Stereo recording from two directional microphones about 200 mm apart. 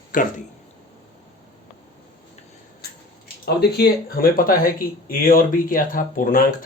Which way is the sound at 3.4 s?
55° left (ahead or behind).